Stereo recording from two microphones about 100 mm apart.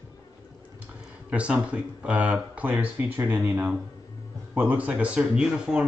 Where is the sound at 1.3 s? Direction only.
10° right (ahead or behind).